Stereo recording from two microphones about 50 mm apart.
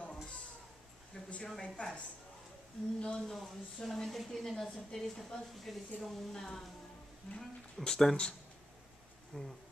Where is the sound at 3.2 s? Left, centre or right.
Centre.